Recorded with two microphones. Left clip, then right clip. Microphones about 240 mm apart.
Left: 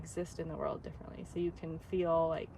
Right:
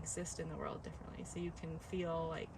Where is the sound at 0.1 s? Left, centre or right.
Centre.